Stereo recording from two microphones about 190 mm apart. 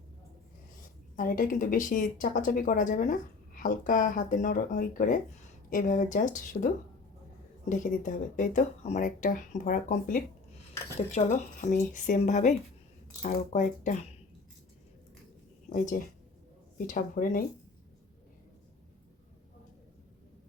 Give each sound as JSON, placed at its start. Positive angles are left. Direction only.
{"t": 1.1, "sound": "a woman's voice", "side_deg": 45}
{"t": 7.7, "sound": "a woman's voice", "side_deg": 45}
{"t": 16.7, "sound": "a woman's voice", "side_deg": 45}